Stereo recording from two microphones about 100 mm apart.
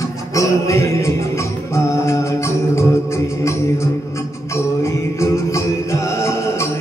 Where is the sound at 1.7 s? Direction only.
30° left (ahead or behind).